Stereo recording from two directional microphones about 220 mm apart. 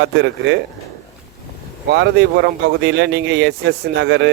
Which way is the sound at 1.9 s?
50° right (ahead or behind).